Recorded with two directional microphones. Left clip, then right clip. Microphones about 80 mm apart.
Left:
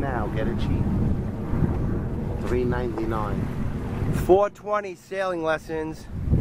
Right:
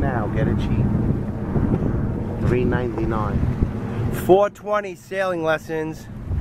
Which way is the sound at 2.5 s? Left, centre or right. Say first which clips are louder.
Right 4 dB; centre.